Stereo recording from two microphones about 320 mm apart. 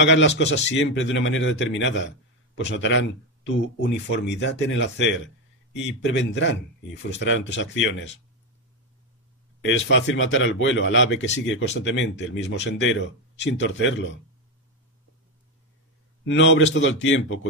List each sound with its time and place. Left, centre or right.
0.0 s a man's voice: left
9.6 s a man's voice: left
16.3 s a man's voice: left